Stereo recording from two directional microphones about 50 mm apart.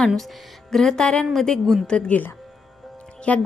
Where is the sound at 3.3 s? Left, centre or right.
Left.